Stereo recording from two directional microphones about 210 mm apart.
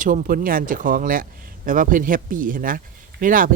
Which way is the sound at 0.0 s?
40° right (ahead or behind).